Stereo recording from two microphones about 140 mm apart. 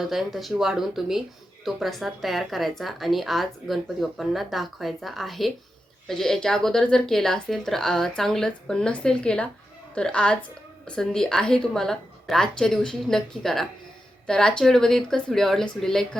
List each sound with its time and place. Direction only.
0.0 s a woman's voice: centre (ahead or behind)